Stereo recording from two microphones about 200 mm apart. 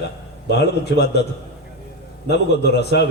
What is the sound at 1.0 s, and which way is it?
Speech, 55° left (ahead or behind).